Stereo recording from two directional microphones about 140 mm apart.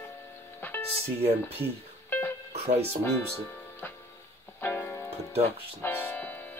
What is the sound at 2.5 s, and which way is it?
Music, 50° right (ahead or behind).